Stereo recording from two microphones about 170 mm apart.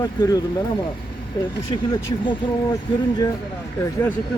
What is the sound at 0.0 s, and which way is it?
Speech, 20° left (ahead or behind).